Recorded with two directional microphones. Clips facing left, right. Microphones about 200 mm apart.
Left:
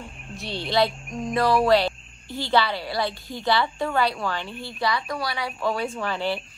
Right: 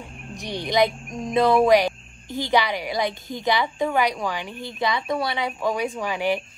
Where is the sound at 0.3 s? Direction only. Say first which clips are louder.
Right 2 dB; 15° right (ahead or behind).